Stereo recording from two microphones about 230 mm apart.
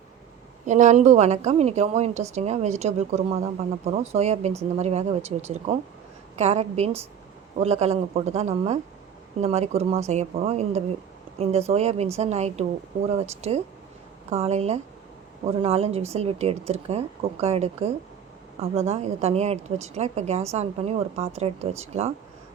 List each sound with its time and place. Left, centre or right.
0.6 s a woman's voice: right